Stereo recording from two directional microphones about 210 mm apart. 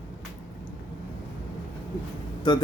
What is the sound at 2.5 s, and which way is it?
Speech, 20° left (ahead or behind).